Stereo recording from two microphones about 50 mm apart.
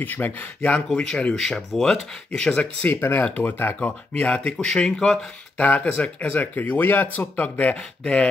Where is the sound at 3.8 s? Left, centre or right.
Left.